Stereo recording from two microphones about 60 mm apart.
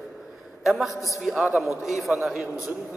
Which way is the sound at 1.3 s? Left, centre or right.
Centre.